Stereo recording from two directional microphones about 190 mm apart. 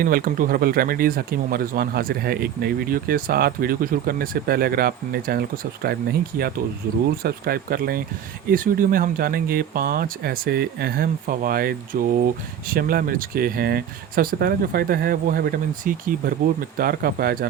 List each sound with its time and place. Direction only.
0.0 s speech: 50° right (ahead or behind)